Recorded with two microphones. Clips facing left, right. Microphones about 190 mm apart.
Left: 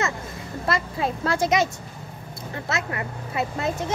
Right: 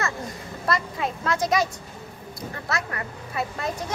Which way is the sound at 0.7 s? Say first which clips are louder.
Left 1 dB; 30° left (ahead or behind).